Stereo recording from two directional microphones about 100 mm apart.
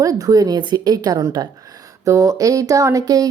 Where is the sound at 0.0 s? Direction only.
35° right (ahead or behind).